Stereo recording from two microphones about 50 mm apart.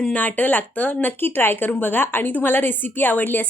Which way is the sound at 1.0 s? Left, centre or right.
Left.